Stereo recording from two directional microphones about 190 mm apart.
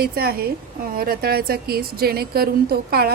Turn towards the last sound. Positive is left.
turn(degrees=-55)  # may be behind; listen again after turning